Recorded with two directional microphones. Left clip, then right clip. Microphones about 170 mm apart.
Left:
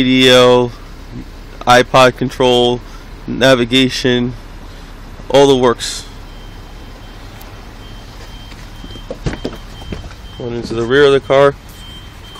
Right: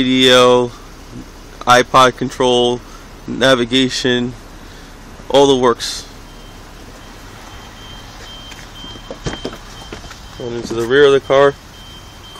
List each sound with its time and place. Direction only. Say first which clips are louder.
0.0 s speech: left 2 dB; 10° left (ahead or behind)
5.3 s speech: left 2 dB; 10° left (ahead or behind)
9.2 s vehicle: left 1 dB; 40° left (ahead or behind)
10.4 s speech: left 1 dB; 5° left (ahead or behind)